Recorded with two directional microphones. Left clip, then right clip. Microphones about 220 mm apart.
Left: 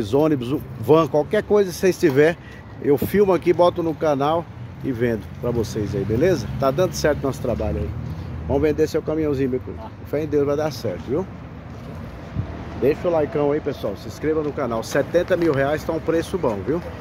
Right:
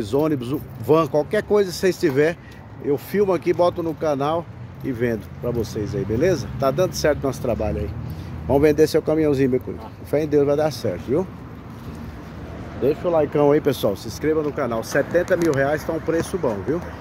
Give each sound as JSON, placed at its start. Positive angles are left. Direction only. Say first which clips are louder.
{"t": 0.0, "sound": "speech", "louder": "left 2 dB", "side_deg": 10}
{"t": 8.5, "sound": "speech", "louder": "right 3 dB", "side_deg": -20}
{"t": 12.8, "sound": "speech", "louder": "left 1 dB", "side_deg": 0}
{"t": 13.3, "sound": "speech", "louder": "right 4 dB", "side_deg": -40}
{"t": 14.0, "sound": "speech", "louder": "right 1 dB", "side_deg": -15}